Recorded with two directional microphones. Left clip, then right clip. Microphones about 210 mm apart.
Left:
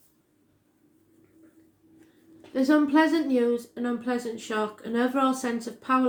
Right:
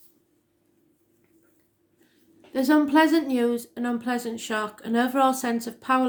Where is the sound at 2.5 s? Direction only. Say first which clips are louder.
Right 2 dB; 50° right (ahead or behind).